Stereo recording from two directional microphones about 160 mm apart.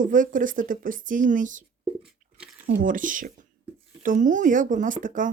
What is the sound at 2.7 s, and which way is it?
Speech, 55° right (ahead or behind).